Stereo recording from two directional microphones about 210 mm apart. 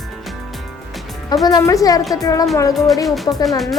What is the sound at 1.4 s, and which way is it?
A woman's voice, 15° left (ahead or behind).